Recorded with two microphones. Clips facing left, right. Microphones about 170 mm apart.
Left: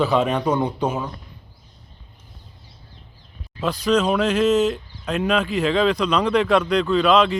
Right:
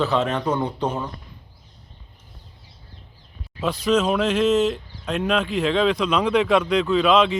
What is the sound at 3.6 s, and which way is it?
Speech, centre (ahead or behind).